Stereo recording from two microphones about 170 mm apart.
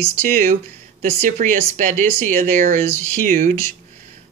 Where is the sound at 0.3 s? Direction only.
50° right (ahead or behind).